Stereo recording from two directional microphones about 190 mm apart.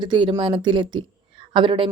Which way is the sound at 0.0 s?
25° right (ahead or behind).